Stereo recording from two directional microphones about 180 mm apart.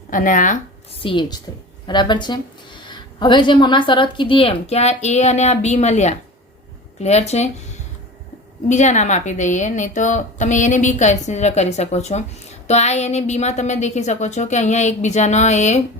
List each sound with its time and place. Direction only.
0.1 s speech: 45° left (ahead or behind)
1.0 s a woman's voice: 25° left (ahead or behind)
8.7 s a woman's voice: 40° left (ahead or behind)